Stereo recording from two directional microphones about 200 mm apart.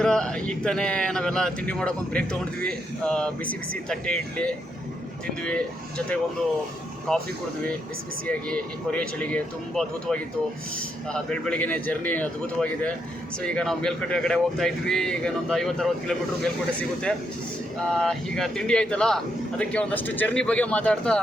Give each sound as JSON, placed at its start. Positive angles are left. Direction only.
{"t": 0.0, "sound": "speech", "side_deg": 5}
{"t": 7.1, "sound": "speech", "side_deg": 0}
{"t": 8.3, "sound": "a man's voice", "side_deg": 5}
{"t": 17.9, "sound": "speech", "side_deg": 0}